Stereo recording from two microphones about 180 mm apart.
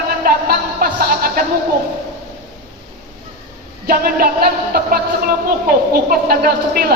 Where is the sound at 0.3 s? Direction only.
55° right (ahead or behind).